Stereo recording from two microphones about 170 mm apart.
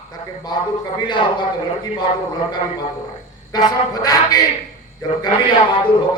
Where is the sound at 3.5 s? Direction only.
25° left (ahead or behind).